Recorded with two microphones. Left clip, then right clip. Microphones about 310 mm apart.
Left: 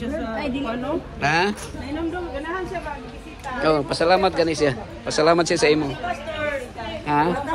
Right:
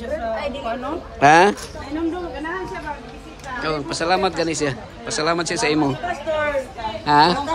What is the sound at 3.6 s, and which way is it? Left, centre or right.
A man's voice, centre.